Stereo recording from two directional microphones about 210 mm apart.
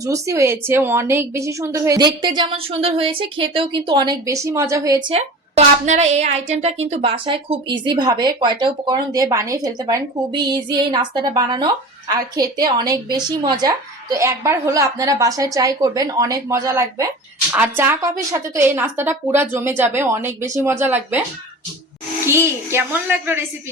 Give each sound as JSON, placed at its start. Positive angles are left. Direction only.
{"t": 0.0, "sound": "a woman's voice", "side_deg": -15}
{"t": 22.3, "sound": "a woman's voice", "side_deg": -10}